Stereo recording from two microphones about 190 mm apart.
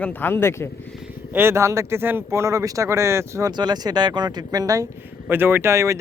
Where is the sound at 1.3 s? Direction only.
15° right (ahead or behind).